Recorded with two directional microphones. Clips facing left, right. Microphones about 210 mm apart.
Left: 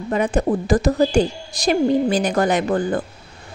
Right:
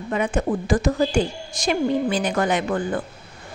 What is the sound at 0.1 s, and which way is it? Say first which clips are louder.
A woman's voice: left 3 dB; 35° left (ahead or behind).